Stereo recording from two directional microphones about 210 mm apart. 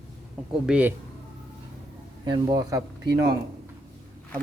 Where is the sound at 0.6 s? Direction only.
5° right (ahead or behind).